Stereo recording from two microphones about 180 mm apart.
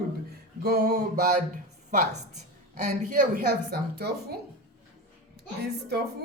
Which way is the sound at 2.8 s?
45° right (ahead or behind).